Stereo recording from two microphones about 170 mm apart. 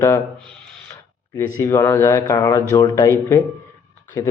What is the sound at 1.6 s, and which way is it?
A man's voice, 15° left (ahead or behind).